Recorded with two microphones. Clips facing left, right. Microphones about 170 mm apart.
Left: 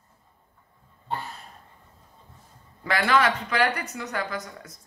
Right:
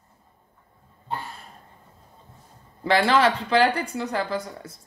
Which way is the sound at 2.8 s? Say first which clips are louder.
Right 3 dB; 30° right (ahead or behind).